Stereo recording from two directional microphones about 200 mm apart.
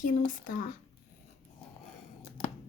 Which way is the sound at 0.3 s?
40° left (ahead or behind).